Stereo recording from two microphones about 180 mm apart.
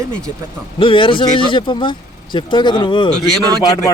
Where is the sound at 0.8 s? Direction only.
30° left (ahead or behind).